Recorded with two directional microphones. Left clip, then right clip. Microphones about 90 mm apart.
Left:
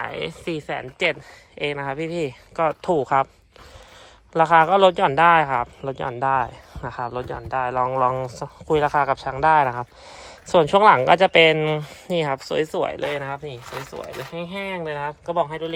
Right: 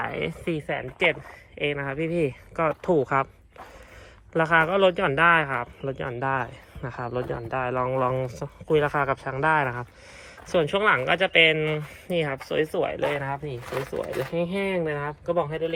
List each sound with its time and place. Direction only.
0.0 s speech: 25° left (ahead or behind)
1.5 s speech: 50° left (ahead or behind)
2.1 s speech: 20° left (ahead or behind)
4.4 s speech: 35° left (ahead or behind)
5.8 s speech: 30° left (ahead or behind)
7.5 s speech: 10° left (ahead or behind)
8.6 s speech: 40° left (ahead or behind)
8.9 s speech: 20° left (ahead or behind)
10.5 s speech: 55° left (ahead or behind)